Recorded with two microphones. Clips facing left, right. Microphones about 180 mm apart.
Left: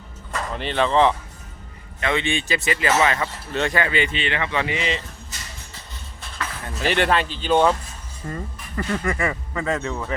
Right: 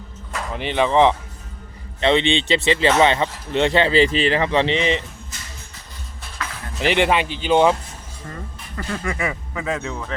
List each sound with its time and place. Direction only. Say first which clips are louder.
0.5 s speech: right 2 dB; 15° right (ahead or behind)
6.8 s speech: right 2 dB; 15° right (ahead or behind)
8.3 s speech: left 4 dB; centre (ahead or behind)